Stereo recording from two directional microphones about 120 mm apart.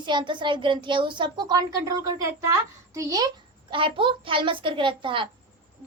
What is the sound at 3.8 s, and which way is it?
A child's voice, 45° right (ahead or behind).